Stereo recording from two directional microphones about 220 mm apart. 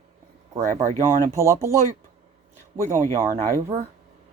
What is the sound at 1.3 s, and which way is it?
Speech, 15° right (ahead or behind).